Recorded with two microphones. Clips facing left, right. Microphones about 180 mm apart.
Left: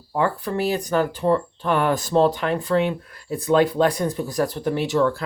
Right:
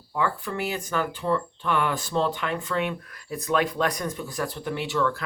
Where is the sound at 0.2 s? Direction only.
40° left (ahead or behind).